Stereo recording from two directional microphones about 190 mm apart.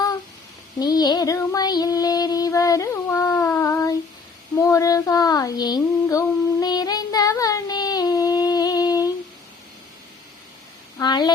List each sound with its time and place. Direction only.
0.8 s child singing: 20° left (ahead or behind)
4.6 s female singing: 20° left (ahead or behind)
11.0 s a sound: 25° left (ahead or behind)